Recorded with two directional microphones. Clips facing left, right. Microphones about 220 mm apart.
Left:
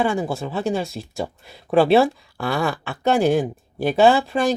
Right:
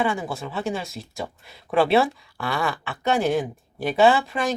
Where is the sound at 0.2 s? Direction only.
30° left (ahead or behind).